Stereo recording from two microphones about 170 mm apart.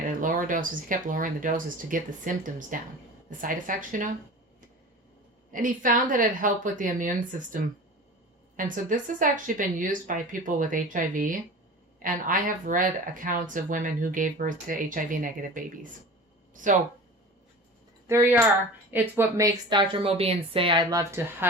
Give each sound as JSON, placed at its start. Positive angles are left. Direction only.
{"t": 0.0, "sound": "speech", "side_deg": -50}
{"t": 5.5, "sound": "speech", "side_deg": -50}
{"t": 18.1, "sound": "speech", "side_deg": -15}